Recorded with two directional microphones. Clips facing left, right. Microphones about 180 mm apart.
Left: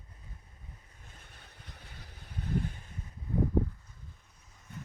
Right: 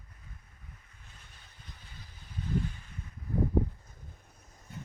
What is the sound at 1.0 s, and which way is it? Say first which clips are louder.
Vehicle: left 4 dB; 55° left (ahead or behind).